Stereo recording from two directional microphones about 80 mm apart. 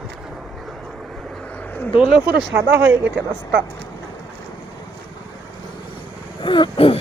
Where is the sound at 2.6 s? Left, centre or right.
Right.